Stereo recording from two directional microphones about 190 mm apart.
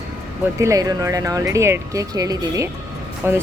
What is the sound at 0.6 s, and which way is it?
Speech, 15° right (ahead or behind).